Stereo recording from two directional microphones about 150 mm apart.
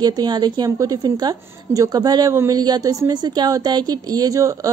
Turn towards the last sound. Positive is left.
turn(degrees=-20)  # may be behind; listen again after turning